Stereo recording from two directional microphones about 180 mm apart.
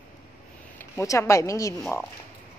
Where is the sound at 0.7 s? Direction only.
15° left (ahead or behind).